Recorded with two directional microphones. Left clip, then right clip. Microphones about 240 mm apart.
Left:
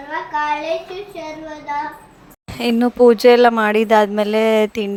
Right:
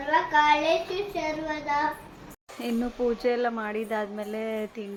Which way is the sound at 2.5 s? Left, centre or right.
Left.